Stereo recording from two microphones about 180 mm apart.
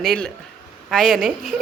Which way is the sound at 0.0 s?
Centre (ahead or behind).